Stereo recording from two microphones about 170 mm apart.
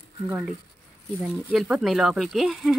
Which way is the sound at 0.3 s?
10° right (ahead or behind).